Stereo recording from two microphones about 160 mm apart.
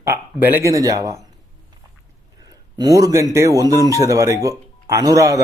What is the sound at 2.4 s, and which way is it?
Speech, 25° right (ahead or behind).